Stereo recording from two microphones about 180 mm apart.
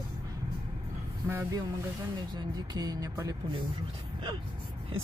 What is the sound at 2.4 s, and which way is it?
Speech, 20° right (ahead or behind).